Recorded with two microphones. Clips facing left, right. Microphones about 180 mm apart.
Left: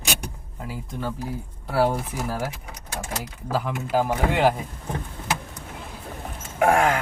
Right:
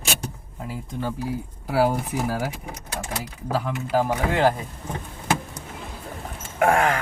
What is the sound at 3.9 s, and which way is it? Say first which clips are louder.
Speech: even; centre (ahead or behind).